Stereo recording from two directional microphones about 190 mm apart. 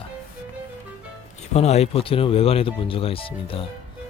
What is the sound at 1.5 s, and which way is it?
Speech, 35° left (ahead or behind).